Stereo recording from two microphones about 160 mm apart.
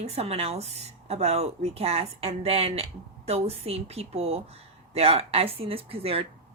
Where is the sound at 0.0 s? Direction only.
40° right (ahead or behind).